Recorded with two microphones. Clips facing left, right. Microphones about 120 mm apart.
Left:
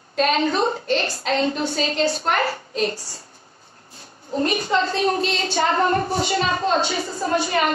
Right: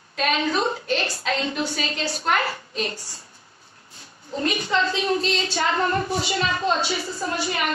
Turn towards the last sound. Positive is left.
turn(degrees=50)  # may be behind; listen again after turning